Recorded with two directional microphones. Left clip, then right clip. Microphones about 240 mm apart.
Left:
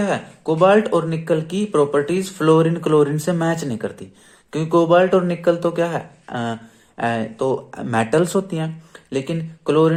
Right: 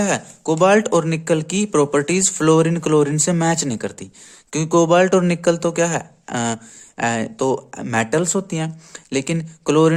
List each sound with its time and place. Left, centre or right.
0.0 s speech: right